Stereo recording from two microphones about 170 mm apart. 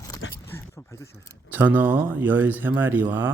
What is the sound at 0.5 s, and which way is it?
Speech, 15° left (ahead or behind).